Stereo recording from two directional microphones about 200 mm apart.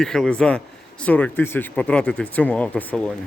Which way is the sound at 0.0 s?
Centre (ahead or behind).